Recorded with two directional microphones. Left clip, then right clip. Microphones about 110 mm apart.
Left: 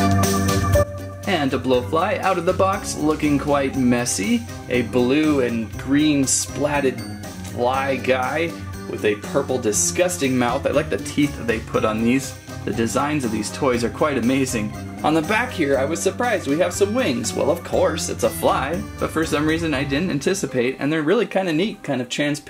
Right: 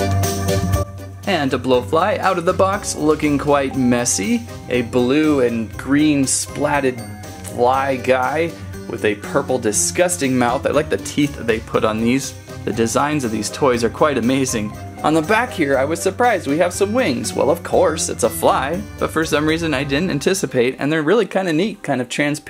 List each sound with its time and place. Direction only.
0.0 s organ: centre (ahead or behind)
1.2 s speech: 35° right (ahead or behind)